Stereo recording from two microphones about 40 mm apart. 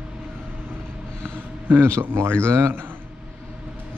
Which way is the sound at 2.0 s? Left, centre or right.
Right.